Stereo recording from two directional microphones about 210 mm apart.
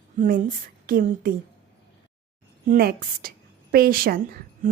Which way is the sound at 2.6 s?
45° right (ahead or behind).